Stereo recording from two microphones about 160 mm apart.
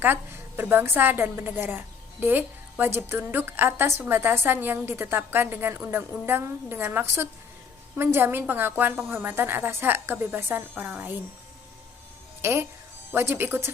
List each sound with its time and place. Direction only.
0.0 s a woman's voice: 15° right (ahead or behind)
12.4 s a woman's voice: 15° right (ahead or behind)